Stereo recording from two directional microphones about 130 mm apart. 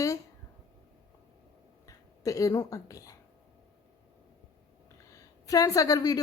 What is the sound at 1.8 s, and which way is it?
Speech, 25° left (ahead or behind).